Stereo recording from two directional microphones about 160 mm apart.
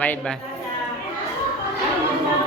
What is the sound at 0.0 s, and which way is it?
Speech, 10° left (ahead or behind).